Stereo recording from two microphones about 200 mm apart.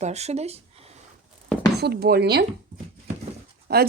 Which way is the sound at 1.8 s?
55° right (ahead or behind).